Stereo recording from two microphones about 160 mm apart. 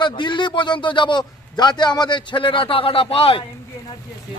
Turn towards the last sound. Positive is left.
turn(degrees=35)  # may be behind; listen again after turning